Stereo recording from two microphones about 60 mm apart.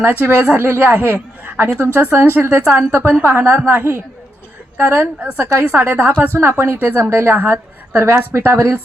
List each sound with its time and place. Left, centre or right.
0.0 s a woman's voice: right